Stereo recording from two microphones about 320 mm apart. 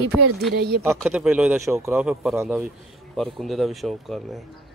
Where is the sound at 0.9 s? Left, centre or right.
Centre.